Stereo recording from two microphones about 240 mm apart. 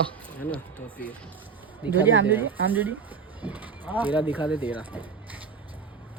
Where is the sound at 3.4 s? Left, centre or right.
Centre.